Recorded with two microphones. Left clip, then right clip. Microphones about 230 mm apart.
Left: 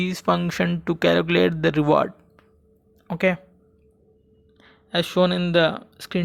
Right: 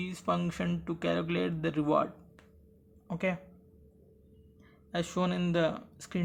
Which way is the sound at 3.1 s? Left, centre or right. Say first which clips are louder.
Left 12 dB; left.